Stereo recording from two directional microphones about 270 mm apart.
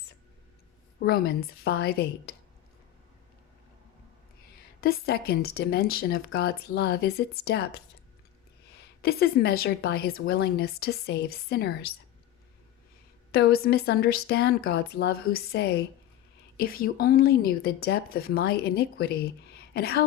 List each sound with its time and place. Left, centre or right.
0.9 s a woman's voice: left
4.8 s a woman's voice: left
9.0 s a woman's voice: left
13.3 s a woman's voice: left